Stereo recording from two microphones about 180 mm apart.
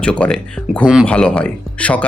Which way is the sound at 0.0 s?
5° left (ahead or behind).